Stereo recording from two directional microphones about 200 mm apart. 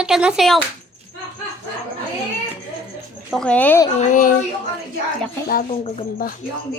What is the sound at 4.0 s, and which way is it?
Speech, 40° left (ahead or behind).